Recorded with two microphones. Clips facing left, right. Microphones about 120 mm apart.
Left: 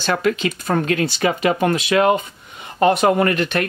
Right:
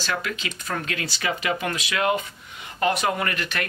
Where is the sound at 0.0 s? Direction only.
40° left (ahead or behind).